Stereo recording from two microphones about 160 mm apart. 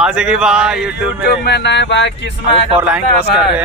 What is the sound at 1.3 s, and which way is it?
Speech, 90° left.